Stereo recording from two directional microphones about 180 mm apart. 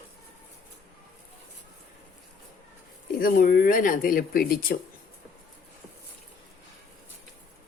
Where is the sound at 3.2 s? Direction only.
55° left (ahead or behind).